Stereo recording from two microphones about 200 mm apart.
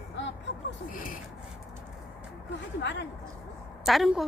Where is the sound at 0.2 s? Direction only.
60° left (ahead or behind).